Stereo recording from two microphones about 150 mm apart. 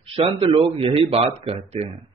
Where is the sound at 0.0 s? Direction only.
35° right (ahead or behind).